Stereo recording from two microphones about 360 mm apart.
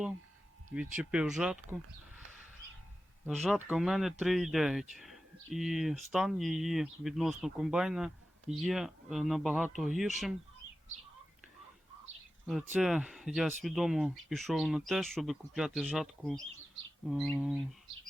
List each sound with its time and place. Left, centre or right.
0.7 s speech: centre
3.2 s speech: centre
12.5 s speech: centre